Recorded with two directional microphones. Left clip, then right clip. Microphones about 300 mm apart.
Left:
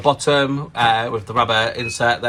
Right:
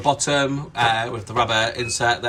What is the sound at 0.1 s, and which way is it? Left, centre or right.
Speech, centre.